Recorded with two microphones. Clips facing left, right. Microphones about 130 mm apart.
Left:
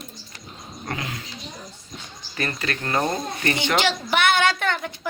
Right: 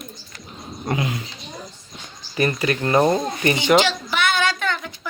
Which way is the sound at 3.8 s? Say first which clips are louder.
Even; 60° left (ahead or behind).